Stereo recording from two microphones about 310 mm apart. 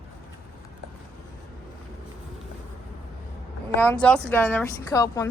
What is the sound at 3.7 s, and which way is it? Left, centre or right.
A woman's voice, centre.